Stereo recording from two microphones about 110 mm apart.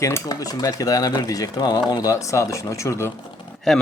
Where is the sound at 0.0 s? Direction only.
30° left (ahead or behind).